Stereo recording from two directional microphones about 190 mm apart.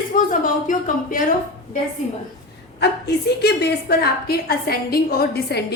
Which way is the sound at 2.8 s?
60° left (ahead or behind).